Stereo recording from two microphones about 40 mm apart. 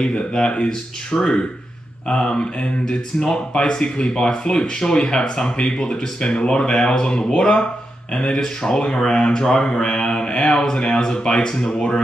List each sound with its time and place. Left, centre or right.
0.3 s speech: left
8.3 s speech: centre
8.7 s speech: left